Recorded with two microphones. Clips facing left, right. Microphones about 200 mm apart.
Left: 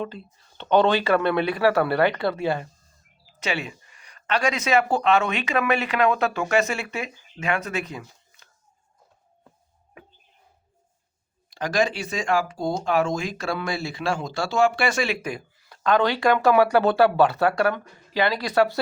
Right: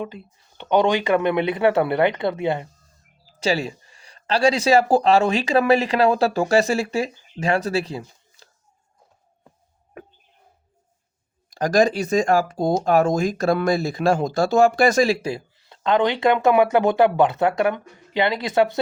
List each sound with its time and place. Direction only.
0.0 s speech: 15° right (ahead or behind)
3.2 s speech: 35° right (ahead or behind)
11.5 s speech: 40° right (ahead or behind); by 18.8 s 20° right (ahead or behind)